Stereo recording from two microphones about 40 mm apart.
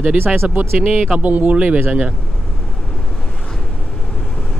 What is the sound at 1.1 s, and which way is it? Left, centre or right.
Speech, right.